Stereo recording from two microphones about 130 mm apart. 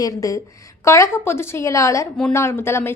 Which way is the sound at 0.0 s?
25° left (ahead or behind).